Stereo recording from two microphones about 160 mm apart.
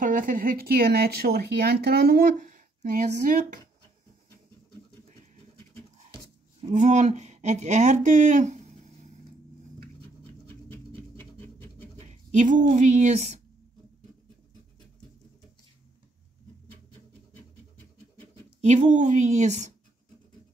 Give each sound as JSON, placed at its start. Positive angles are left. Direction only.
{"t": 0.0, "sound": "speech", "side_deg": -60}
{"t": 2.3, "sound": "speech", "side_deg": -55}
{"t": 6.7, "sound": "speech", "side_deg": -45}
{"t": 10.7, "sound": "a sound", "side_deg": 10}
{"t": 12.1, "sound": "speech", "side_deg": -50}
{"t": 18.6, "sound": "speech", "side_deg": -45}